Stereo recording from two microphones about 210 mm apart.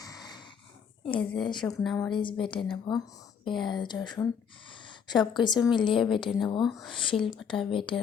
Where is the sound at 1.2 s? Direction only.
Centre (ahead or behind).